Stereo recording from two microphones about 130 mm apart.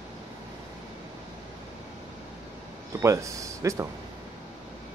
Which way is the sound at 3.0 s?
25° right (ahead or behind).